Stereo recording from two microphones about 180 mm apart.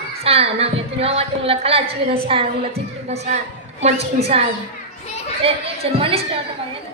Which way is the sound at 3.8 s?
35° right (ahead or behind).